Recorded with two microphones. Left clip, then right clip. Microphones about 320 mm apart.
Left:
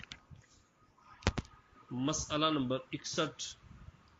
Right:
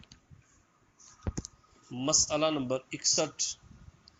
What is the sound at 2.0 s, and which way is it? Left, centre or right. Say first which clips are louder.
Speech: right 5 dB; centre.